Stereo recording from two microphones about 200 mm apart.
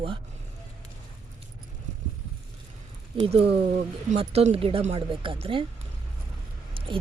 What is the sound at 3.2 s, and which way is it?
Speech, 30° right (ahead or behind).